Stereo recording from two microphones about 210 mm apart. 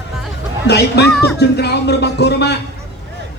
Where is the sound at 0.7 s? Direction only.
55° left (ahead or behind).